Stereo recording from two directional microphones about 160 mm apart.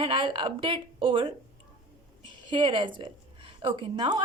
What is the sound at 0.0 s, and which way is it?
A woman's voice, 30° right (ahead or behind).